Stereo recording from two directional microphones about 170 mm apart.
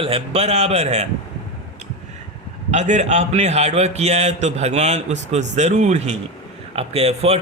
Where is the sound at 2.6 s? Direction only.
45° right (ahead or behind).